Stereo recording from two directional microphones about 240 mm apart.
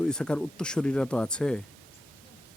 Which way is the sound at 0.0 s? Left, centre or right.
Centre.